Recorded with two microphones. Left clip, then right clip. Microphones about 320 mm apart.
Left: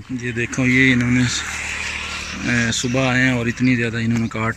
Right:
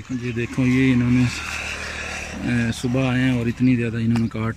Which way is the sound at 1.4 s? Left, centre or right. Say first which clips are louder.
Left 3 dB; right.